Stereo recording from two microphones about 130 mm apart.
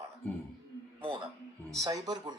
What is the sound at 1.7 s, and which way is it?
Speech, 25° right (ahead or behind).